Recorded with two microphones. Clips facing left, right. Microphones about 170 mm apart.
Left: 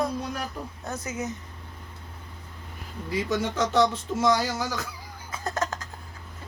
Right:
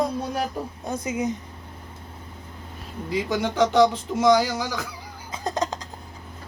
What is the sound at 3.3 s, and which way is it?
Speech, 90° right.